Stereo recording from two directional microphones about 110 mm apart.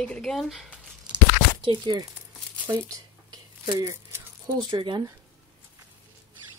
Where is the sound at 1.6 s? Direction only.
45° right (ahead or behind).